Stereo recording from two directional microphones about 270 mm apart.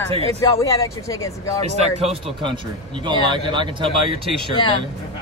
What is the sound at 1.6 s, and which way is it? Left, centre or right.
Speech, right.